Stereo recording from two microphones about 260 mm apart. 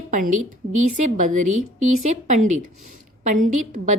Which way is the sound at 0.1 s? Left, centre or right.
Right.